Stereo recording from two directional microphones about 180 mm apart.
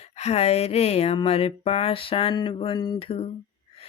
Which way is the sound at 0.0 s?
35° left (ahead or behind).